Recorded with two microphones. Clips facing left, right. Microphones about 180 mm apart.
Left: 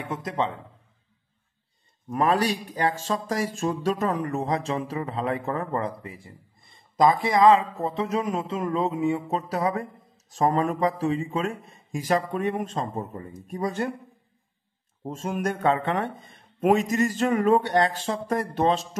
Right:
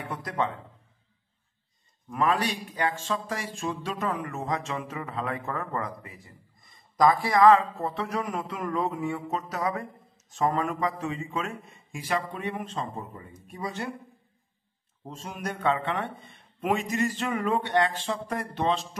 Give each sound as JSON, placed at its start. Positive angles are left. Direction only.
{"t": 0.0, "sound": "speech", "side_deg": 20}
{"t": 2.0, "sound": "speech", "side_deg": 35}
{"t": 15.0, "sound": "a man's voice", "side_deg": 50}